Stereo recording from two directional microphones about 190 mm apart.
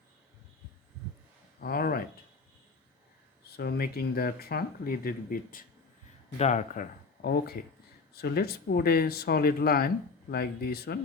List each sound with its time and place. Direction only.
1.6 s speech: 50° left (ahead or behind)
3.6 s speech: 55° left (ahead or behind)
7.2 s speech: 55° left (ahead or behind)